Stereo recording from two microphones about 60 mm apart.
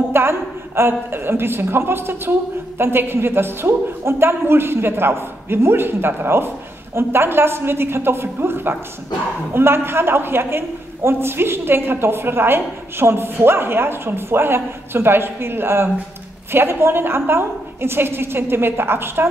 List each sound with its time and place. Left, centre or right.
0.1 s a woman's voice: right